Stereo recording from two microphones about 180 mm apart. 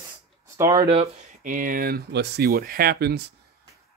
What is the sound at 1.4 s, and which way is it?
Speech, 50° right (ahead or behind).